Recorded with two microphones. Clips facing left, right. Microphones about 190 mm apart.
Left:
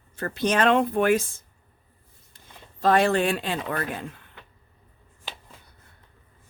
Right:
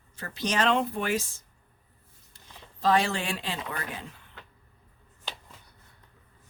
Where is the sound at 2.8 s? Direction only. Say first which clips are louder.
Left 5 dB; 55° left (ahead or behind).